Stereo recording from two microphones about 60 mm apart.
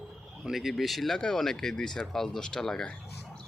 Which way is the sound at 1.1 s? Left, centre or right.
Centre.